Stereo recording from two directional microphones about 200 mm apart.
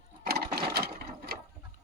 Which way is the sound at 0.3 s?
50° right (ahead or behind).